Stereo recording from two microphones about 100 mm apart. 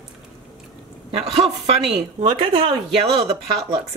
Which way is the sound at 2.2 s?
70° right (ahead or behind).